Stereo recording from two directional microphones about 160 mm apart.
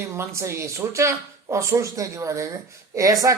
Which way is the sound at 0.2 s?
15° right (ahead or behind).